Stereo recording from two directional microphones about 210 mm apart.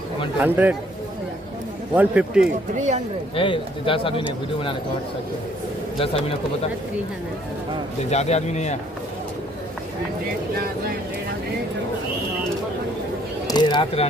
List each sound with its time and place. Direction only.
0.4 s a man's voice: 10° right (ahead or behind)
2.0 s a man's voice: 5° right (ahead or behind)
3.3 s speech: 25° left (ahead or behind)
5.9 s speech: 25° left (ahead or behind)
8.1 s a man's voice: 30° left (ahead or behind)
13.5 s speech: 20° left (ahead or behind)